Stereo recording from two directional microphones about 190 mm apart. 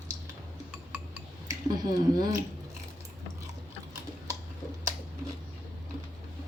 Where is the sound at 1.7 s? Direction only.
20° right (ahead or behind).